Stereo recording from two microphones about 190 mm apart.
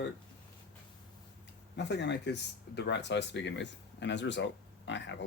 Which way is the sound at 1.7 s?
65° left (ahead or behind).